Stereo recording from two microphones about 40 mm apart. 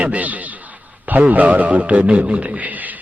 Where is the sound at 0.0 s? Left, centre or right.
Right.